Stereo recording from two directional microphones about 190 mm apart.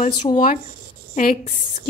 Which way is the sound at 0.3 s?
25° left (ahead or behind).